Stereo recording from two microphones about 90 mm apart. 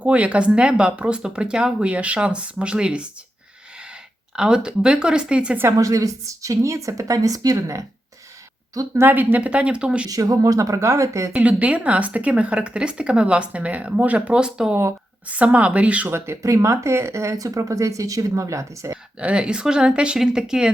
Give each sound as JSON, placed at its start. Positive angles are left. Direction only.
{"t": 0.0, "sound": "speech", "side_deg": -15}
{"t": 4.4, "sound": "speech", "side_deg": -10}
{"t": 5.7, "sound": "speech", "side_deg": -40}
{"t": 9.0, "sound": "speech", "side_deg": -20}
{"t": 10.1, "sound": "speech", "side_deg": -40}
{"t": 11.3, "sound": "speech", "side_deg": -15}
{"t": 16.1, "sound": "speech", "side_deg": -30}
{"t": 19.2, "sound": "speech", "side_deg": -15}